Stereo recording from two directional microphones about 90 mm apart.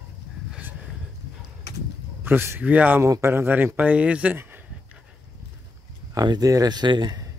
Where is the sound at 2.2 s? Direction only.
25° right (ahead or behind).